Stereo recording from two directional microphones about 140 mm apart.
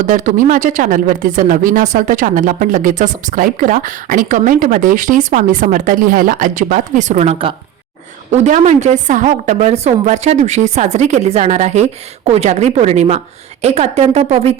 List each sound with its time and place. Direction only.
0.0 s a woman's voice: 70° right (ahead or behind); by 7.5 s 45° right (ahead or behind)
8.3 s a woman's voice: 55° right (ahead or behind)